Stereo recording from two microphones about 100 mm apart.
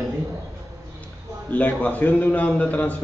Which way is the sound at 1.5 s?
15° left (ahead or behind).